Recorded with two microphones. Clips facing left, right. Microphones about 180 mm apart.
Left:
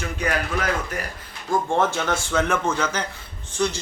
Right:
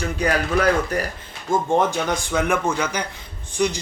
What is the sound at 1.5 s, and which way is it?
Speech, 20° right (ahead or behind).